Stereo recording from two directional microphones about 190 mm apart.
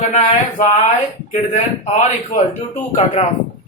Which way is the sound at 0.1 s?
40° left (ahead or behind).